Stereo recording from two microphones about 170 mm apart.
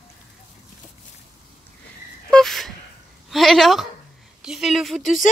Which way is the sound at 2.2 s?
Centre (ahead or behind).